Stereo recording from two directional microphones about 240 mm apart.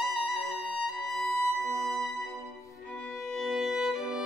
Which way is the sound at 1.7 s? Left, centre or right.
Centre.